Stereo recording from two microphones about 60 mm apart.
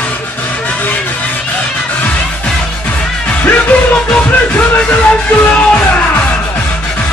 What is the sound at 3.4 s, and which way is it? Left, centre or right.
Music, left.